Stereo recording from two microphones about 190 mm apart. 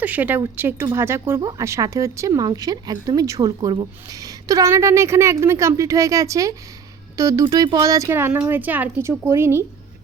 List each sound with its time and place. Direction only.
0.0 s speech: 10° right (ahead or behind)